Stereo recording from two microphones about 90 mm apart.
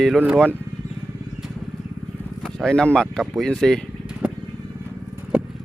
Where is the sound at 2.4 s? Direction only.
5° left (ahead or behind).